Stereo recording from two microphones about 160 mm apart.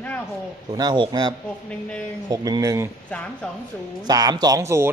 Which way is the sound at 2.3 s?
20° right (ahead or behind).